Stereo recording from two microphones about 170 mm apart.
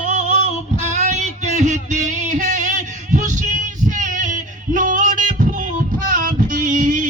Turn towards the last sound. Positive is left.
turn(degrees=-50)  # may be behind; listen again after turning